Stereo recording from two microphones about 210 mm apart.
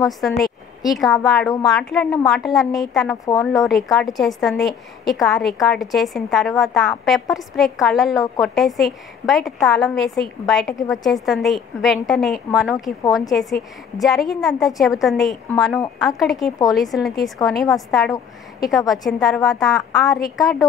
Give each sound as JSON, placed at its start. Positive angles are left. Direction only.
{"t": 0.4, "sound": "a woman's voice", "side_deg": 0}
{"t": 3.3, "sound": "speech", "side_deg": 15}
{"t": 3.6, "sound": "a woman's voice", "side_deg": 0}